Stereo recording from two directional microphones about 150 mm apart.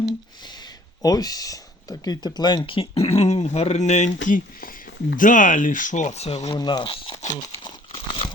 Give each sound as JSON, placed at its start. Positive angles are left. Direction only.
{"t": 1.0, "sound": "speech", "side_deg": 25}
{"t": 6.6, "sound": "speech", "side_deg": 30}
{"t": 7.3, "sound": "crumpling", "side_deg": 30}